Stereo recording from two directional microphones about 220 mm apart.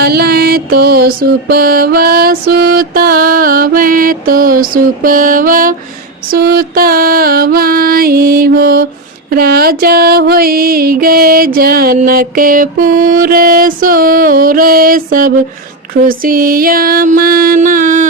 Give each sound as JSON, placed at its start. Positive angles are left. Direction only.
{"t": 0.0, "sound": "music", "side_deg": -45}